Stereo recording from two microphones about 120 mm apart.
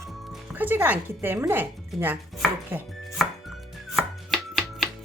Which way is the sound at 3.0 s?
Centre (ahead or behind).